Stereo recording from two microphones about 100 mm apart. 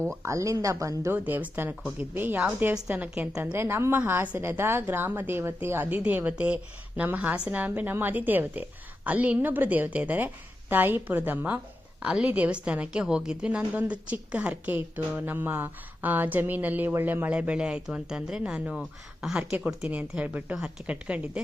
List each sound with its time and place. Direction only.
0.2 s speech: 30° right (ahead or behind)
1.1 s a woman's voice: 15° right (ahead or behind)